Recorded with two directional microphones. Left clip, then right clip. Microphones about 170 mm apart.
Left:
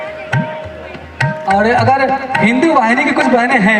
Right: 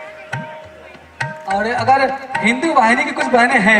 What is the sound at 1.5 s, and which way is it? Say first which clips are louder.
A man's voice: left 3 dB; 10° left (ahead or behind).